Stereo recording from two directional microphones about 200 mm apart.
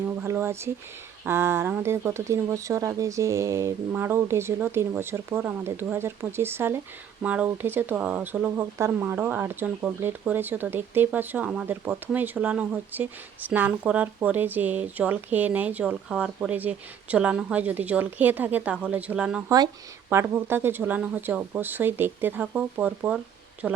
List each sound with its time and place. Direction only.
0.2 s speech: 15° right (ahead or behind)
19.5 s a woman's voice: 20° right (ahead or behind); by 23.8 s 5° right (ahead or behind)